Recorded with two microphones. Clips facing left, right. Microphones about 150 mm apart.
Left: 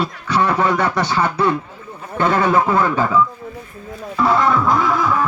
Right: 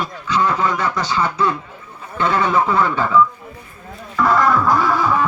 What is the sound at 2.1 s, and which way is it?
Speech, 45° left (ahead or behind).